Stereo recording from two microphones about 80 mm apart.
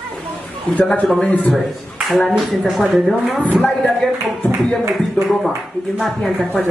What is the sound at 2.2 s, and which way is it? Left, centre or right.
Speech, centre.